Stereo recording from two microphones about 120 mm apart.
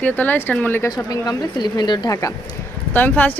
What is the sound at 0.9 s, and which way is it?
Speech, 35° left (ahead or behind).